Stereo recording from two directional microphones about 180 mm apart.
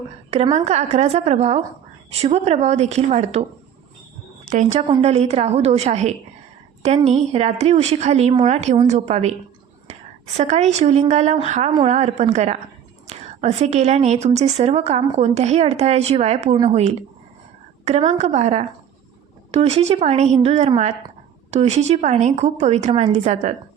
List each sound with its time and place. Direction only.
0.5 s a woman's voice: 40° right (ahead or behind)
4.4 s a woman's voice: 45° right (ahead or behind)
10.3 s a woman's voice: 40° right (ahead or behind)